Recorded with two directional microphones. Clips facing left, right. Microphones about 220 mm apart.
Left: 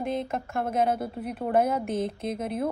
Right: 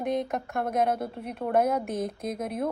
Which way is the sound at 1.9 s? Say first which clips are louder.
Left 2 dB; 30° left (ahead or behind).